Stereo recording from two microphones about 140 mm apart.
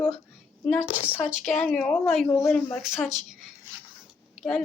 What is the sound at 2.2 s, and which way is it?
Speech, 20° left (ahead or behind).